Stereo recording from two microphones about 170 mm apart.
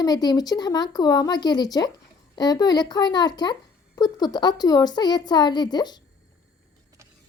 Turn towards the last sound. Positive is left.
turn(degrees=25)  # may be behind; listen again after turning